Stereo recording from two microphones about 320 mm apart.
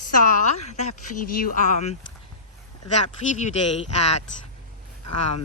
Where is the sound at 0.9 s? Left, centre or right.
Left.